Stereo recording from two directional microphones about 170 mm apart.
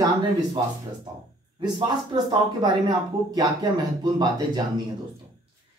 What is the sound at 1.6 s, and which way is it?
Speech, 25° right (ahead or behind).